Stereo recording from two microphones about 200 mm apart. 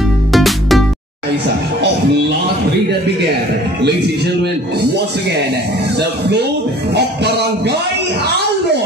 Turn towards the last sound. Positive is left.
turn(degrees=-55)  # may be behind; listen again after turning